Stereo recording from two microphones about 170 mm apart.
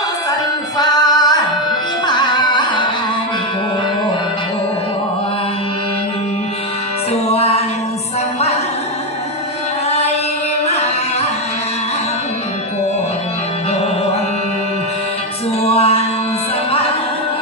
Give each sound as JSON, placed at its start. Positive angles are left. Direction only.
{"t": 0.8, "sound": "music", "side_deg": 25}
{"t": 7.1, "sound": "music", "side_deg": 35}
{"t": 10.7, "sound": "music", "side_deg": 40}
{"t": 15.6, "sound": "music", "side_deg": 35}